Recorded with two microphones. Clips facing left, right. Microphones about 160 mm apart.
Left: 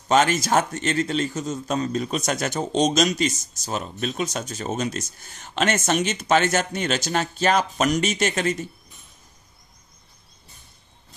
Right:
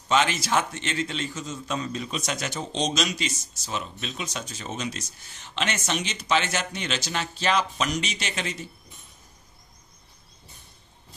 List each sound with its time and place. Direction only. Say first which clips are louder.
0.1 s a man's voice: left 4 dB; 45° left (ahead or behind)